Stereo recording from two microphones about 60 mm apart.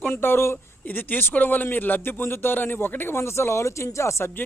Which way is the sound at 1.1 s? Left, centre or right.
Left.